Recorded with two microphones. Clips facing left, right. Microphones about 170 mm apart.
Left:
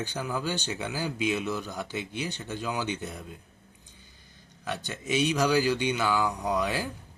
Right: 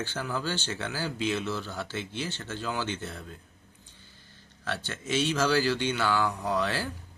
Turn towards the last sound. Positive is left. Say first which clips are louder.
# left 1 dB
turn(degrees=15)  # may be behind; listen again after turning